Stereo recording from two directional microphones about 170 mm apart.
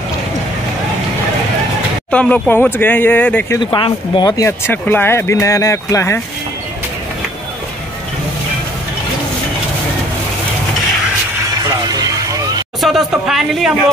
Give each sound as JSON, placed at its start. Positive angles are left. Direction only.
{"t": 2.0, "sound": "speech", "side_deg": 5}
{"t": 3.7, "sound": "speech", "side_deg": 30}
{"t": 11.9, "sound": "music", "side_deg": -20}
{"t": 12.8, "sound": "a woman's voice", "side_deg": -5}